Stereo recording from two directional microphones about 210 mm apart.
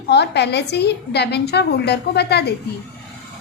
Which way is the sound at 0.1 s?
50° left (ahead or behind).